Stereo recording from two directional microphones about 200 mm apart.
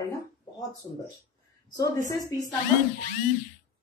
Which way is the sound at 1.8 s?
15° left (ahead or behind).